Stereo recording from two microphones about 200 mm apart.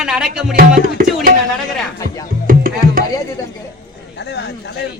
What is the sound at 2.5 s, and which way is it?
Music, 45° right (ahead or behind).